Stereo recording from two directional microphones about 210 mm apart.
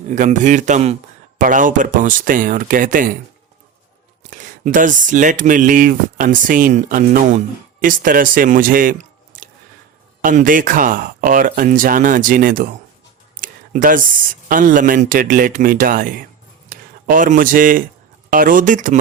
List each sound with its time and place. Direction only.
0.1 s speech: 35° right (ahead or behind)
4.3 s speech: 40° right (ahead or behind)
13.3 s a sound: 40° right (ahead or behind)
14.5 s speech: 40° right (ahead or behind)